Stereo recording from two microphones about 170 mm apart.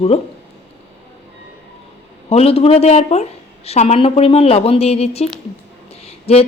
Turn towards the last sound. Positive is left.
turn(degrees=35)  # may be behind; listen again after turning